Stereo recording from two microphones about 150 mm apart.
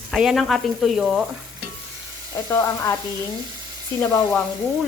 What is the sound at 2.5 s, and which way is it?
Sizzle, 20° left (ahead or behind).